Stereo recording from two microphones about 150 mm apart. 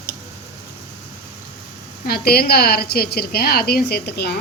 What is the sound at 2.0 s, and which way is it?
A woman's voice, 90° left.